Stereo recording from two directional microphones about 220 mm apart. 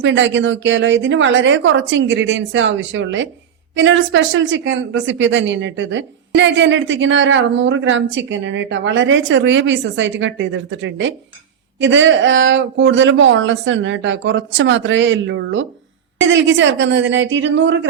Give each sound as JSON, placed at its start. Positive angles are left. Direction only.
{"t": 0.0, "sound": "speech", "side_deg": -55}